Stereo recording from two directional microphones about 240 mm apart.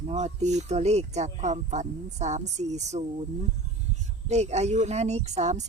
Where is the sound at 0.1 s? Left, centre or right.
Right.